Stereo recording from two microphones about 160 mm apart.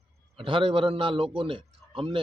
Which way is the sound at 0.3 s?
35° right (ahead or behind).